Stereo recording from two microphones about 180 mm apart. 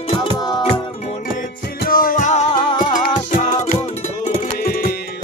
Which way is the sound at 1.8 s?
50° left (ahead or behind).